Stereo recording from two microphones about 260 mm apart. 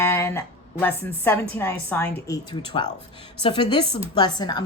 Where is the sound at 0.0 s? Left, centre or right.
Centre.